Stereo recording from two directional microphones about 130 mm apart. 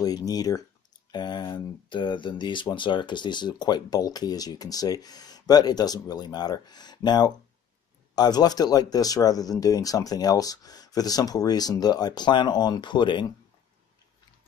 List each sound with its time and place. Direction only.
0.0 s speech: 30° left (ahead or behind)